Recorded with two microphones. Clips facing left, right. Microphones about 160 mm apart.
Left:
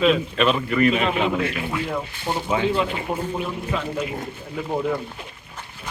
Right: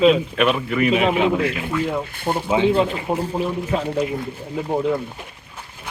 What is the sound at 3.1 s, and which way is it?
Speech, 35° right (ahead or behind).